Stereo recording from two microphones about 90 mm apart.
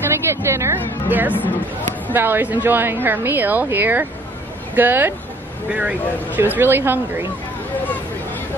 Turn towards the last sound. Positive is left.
turn(degrees=-25)  # may be behind; listen again after turning